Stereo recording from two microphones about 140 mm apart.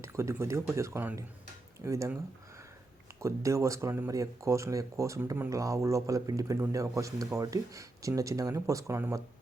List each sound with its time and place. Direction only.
0.0 s speech: 20° right (ahead or behind)
3.2 s speech: 20° right (ahead or behind)